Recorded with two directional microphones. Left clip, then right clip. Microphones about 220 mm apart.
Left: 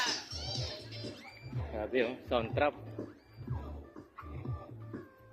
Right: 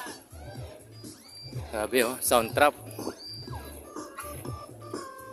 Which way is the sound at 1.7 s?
40° right (ahead or behind).